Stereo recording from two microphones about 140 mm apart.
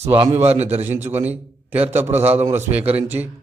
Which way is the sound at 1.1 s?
10° right (ahead or behind).